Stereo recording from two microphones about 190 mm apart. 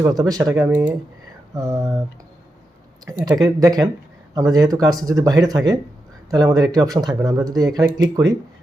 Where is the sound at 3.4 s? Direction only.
20° right (ahead or behind).